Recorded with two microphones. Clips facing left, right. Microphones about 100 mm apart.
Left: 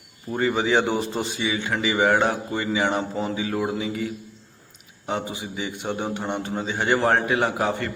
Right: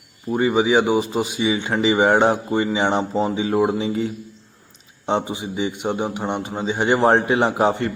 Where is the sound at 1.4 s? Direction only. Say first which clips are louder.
Right 6 dB; 20° right (ahead or behind).